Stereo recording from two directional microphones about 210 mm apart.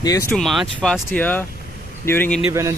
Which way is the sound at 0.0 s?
15° left (ahead or behind).